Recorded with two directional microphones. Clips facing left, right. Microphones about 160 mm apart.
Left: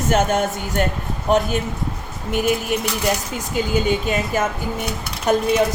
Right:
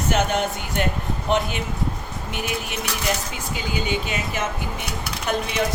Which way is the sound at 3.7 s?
45° left (ahead or behind).